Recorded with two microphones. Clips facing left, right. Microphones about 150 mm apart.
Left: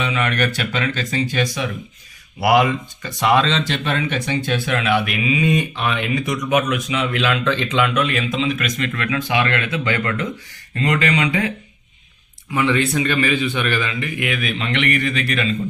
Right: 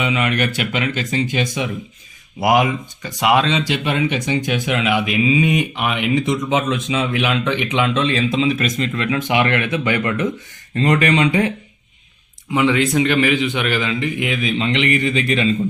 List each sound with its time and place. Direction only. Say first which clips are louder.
0.0 s speech: right 1 dB; 15° right (ahead or behind)